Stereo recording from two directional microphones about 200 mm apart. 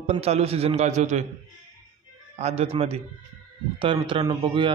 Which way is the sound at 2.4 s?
30° right (ahead or behind).